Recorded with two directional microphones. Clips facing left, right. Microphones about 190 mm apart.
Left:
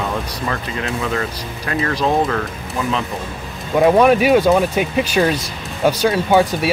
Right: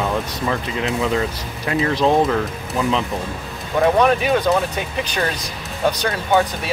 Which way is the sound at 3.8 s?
10° left (ahead or behind).